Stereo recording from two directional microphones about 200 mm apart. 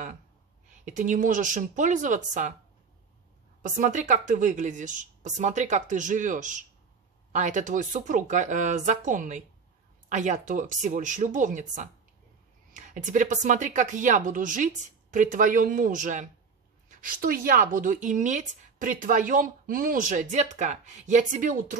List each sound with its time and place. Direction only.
0.8 s a woman's voice: 40° right (ahead or behind)
3.6 s a woman's voice: 40° right (ahead or behind)